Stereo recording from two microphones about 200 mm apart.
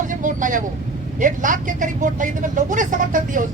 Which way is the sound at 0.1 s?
40° right (ahead or behind).